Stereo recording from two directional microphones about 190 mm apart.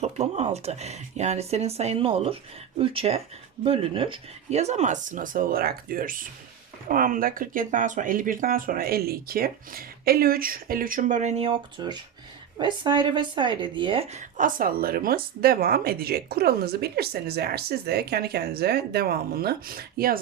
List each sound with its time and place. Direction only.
0.0 s speech: 35° right (ahead or behind); by 20.1 s 50° right (ahead or behind)